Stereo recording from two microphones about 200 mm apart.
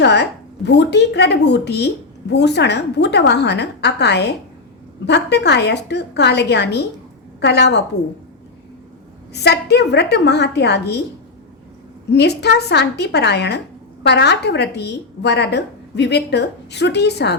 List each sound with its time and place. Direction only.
0.0 s a woman's voice: 55° left (ahead or behind)
9.3 s a woman's voice: 55° left (ahead or behind)
12.1 s a woman's voice: 55° left (ahead or behind)